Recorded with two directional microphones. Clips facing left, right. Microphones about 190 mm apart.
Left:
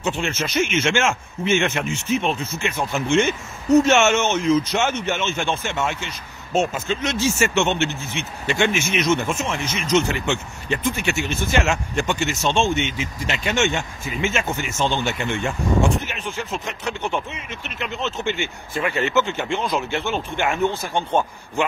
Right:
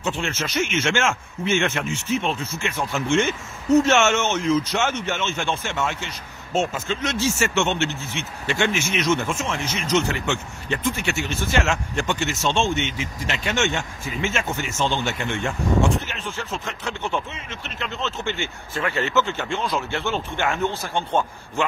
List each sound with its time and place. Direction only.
0.0 s speech: 20° left (ahead or behind)